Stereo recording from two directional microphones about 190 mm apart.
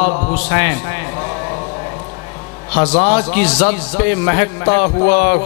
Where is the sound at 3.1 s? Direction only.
10° left (ahead or behind).